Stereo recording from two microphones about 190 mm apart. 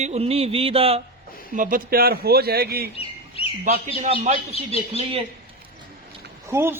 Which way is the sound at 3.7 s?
35° right (ahead or behind).